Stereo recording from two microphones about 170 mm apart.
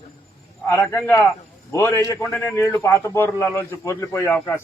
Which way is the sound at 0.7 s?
10° left (ahead or behind).